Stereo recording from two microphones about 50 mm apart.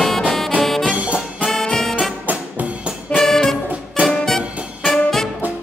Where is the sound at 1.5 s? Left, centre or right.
Centre.